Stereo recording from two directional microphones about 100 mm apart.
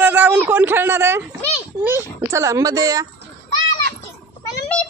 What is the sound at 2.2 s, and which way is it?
Speech, 30° right (ahead or behind).